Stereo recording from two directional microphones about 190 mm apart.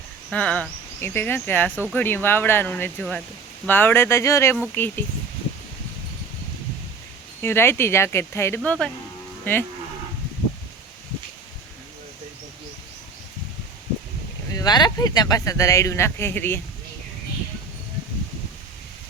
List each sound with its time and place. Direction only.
0.3 s speech: 5° left (ahead or behind)
7.4 s speech: 10° left (ahead or behind)
14.5 s speech: 20° left (ahead or behind)